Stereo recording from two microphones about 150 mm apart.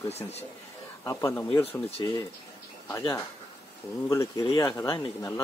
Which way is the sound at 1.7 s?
40° left (ahead or behind).